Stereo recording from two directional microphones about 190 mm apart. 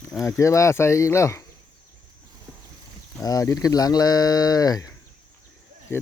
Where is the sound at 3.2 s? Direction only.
20° left (ahead or behind).